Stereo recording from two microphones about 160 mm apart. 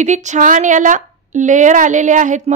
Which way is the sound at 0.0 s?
50° right (ahead or behind).